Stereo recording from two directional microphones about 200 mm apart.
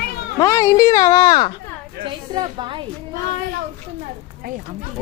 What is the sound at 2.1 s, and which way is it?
Speech, 25° right (ahead or behind).